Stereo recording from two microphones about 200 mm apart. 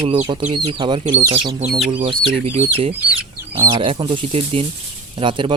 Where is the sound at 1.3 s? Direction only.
30° right (ahead or behind).